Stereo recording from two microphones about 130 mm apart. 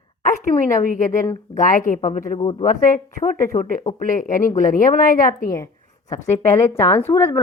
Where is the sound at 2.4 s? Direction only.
30° left (ahead or behind).